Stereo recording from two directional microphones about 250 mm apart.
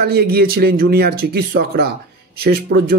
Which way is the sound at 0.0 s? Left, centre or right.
Right.